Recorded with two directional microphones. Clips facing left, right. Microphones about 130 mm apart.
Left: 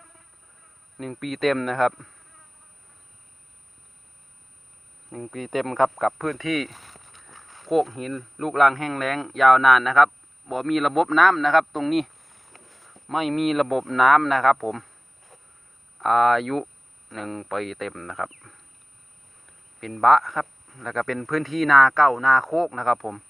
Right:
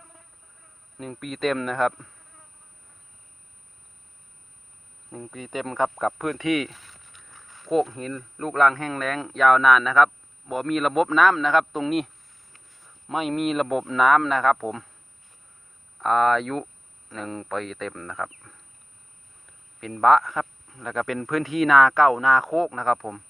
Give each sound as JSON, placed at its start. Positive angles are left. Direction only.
{"t": 1.2, "sound": "speech", "side_deg": 0}
{"t": 5.1, "sound": "speech", "side_deg": -5}
{"t": 6.7, "sound": "a sound", "side_deg": 45}
{"t": 7.1, "sound": "walk", "side_deg": 30}
{"t": 7.7, "sound": "speech", "side_deg": 5}
{"t": 12.5, "sound": "a sound", "side_deg": 90}
{"t": 13.1, "sound": "speech", "side_deg": 0}
{"t": 16.0, "sound": "speech", "side_deg": 5}
{"t": 19.8, "sound": "speech", "side_deg": 0}